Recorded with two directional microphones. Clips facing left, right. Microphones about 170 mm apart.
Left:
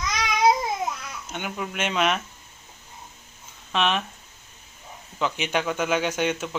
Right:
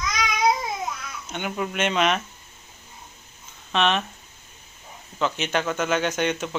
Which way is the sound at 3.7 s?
5° left (ahead or behind).